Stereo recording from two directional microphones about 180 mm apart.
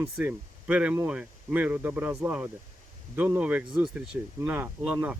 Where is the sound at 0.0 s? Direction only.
10° right (ahead or behind).